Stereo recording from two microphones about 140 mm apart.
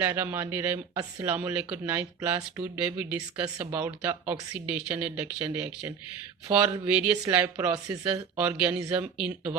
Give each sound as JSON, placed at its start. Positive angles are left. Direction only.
{"t": 0.0, "sound": "speech", "side_deg": -15}
{"t": 7.4, "sound": "speech", "side_deg": -25}
{"t": 8.1, "sound": "speech", "side_deg": -10}